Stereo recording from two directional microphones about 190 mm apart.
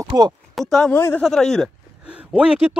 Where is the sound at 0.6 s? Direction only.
Centre (ahead or behind).